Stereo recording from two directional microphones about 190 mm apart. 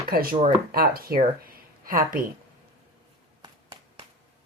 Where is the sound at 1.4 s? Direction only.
50° right (ahead or behind).